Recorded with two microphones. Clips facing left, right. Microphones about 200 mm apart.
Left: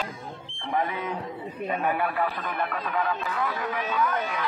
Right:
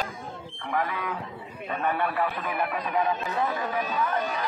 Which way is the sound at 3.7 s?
40° right (ahead or behind).